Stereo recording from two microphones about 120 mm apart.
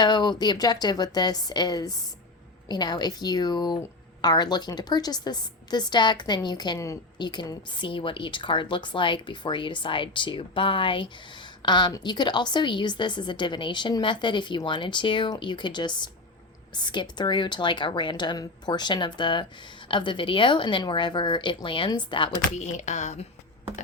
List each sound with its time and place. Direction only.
0.0 s a woman's voice: 35° left (ahead or behind)
7.2 s a woman's voice: 40° left (ahead or behind)
22.5 s speech: 75° left (ahead or behind)